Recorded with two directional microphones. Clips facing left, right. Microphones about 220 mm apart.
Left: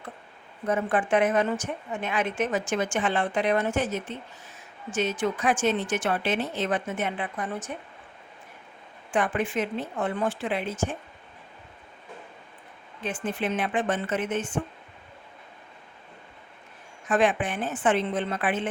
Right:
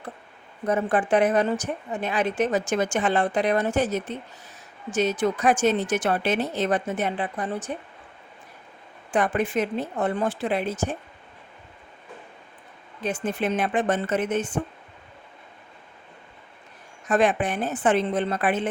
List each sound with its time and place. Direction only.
0.7 s speech: 35° right (ahead or behind)
9.1 s speech: 40° right (ahead or behind)
13.0 s speech: 40° right (ahead or behind)
17.1 s speech: 40° right (ahead or behind)